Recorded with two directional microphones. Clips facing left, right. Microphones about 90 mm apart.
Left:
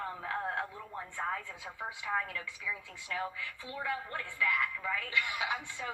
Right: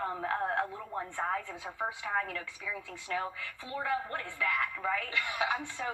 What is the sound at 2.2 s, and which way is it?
A woman's voice, 35° right (ahead or behind).